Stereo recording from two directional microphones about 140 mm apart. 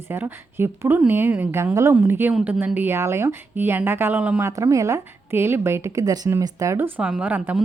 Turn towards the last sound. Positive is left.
turn(degrees=-10)  # may be behind; listen again after turning